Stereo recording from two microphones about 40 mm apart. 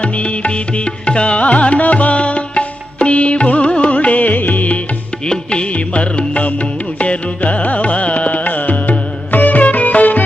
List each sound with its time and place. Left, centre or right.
0.0 s music: left
3.9 s music: left
5.2 s music: left